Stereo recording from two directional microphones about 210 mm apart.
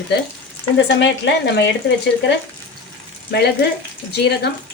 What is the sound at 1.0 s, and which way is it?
Speech, 55° left (ahead or behind).